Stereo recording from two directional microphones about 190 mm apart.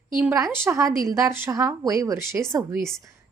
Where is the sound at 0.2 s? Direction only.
10° right (ahead or behind).